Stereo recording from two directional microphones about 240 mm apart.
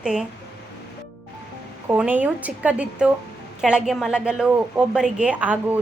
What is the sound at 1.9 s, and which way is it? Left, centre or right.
A woman's voice, centre.